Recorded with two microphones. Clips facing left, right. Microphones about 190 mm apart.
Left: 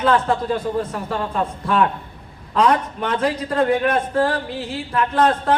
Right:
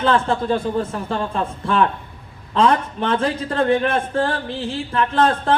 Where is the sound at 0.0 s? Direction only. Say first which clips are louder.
Even; 25° right (ahead or behind).